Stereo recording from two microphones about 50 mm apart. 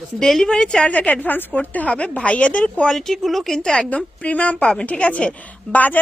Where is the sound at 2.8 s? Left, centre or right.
Centre.